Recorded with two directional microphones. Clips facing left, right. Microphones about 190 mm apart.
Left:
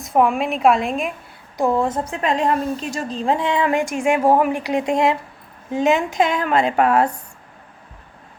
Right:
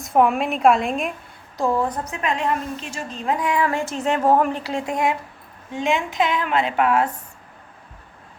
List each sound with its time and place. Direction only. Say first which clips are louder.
0.0 s a woman's voice: left 1 dB; centre (ahead or behind)
1.5 s a woman's voice: left 3 dB; 20° left (ahead or behind)
5.7 s a woman's voice: left 5 dB; 40° left (ahead or behind)